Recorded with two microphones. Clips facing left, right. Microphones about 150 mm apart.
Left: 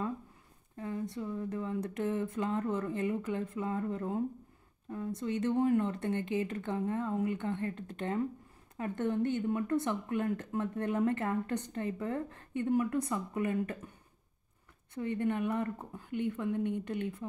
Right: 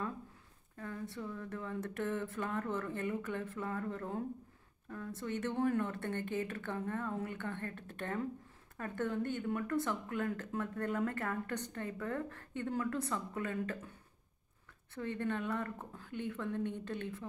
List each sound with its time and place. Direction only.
0.7 s a woman's voice: 20° left (ahead or behind)
15.0 s speech: 15° left (ahead or behind)